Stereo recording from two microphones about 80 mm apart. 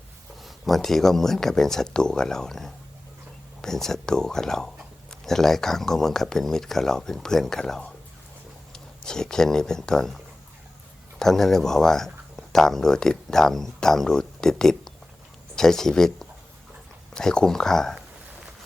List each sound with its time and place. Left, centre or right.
0.4 s speech: centre